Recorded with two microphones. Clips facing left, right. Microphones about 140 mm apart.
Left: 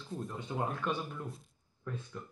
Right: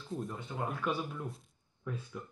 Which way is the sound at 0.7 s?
Centre (ahead or behind).